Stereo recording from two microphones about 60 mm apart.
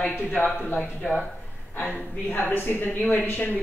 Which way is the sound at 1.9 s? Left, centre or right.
Left.